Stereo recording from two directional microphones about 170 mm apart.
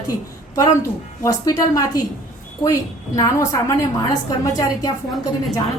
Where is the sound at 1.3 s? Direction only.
20° left (ahead or behind).